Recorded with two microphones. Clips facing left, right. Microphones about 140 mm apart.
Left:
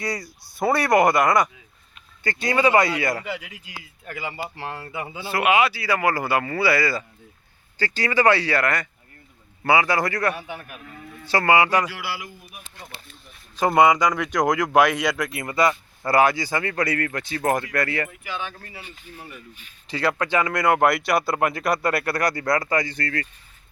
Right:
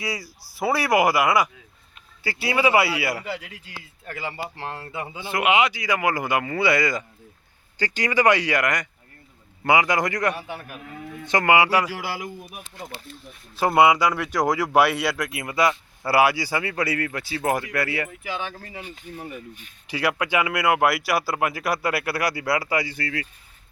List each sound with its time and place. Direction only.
0.0 s speech: 5° right (ahead or behind)
3.4 s speech: 10° left (ahead or behind)
4.5 s speech: 25° right (ahead or behind)
10.3 s speech: 5° right (ahead or behind)
11.3 s speech: 15° right (ahead or behind)
11.9 s speech: 40° right (ahead or behind)
13.6 s speech: 5° right (ahead or behind)
18.5 s speech: 45° right (ahead or behind)
19.9 s speech: 10° right (ahead or behind)